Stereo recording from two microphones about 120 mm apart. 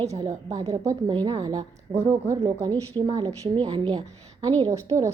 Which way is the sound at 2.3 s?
35° right (ahead or behind).